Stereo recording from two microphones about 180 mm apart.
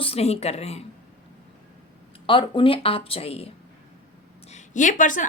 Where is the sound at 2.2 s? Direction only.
30° left (ahead or behind).